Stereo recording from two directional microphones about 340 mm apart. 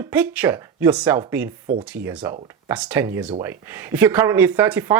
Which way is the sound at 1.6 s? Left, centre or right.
Right.